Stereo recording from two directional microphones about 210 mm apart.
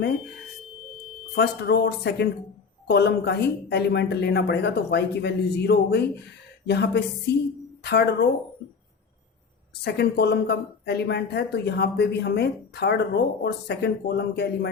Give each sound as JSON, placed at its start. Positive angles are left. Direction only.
{"t": 1.4, "sound": "speech", "side_deg": 50}
{"t": 9.8, "sound": "speech", "side_deg": 50}